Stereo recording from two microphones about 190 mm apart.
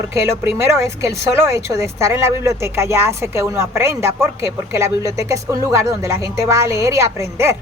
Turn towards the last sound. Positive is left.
turn(degrees=-15)  # may be behind; listen again after turning